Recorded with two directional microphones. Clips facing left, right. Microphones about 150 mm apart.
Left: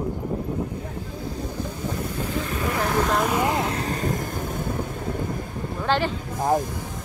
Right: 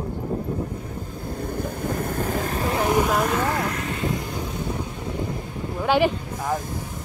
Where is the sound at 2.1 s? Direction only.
45° right (ahead or behind).